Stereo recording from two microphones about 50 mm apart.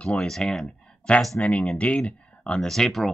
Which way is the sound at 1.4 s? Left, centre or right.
Left.